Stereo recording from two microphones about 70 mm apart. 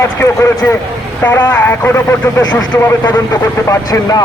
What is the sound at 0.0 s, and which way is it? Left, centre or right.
Speech, left.